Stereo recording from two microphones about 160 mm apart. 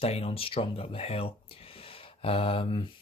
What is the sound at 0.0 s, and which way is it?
Speech, 40° left (ahead or behind).